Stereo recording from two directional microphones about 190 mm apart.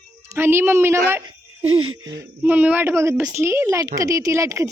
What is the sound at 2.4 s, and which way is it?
Speech, 10° right (ahead or behind).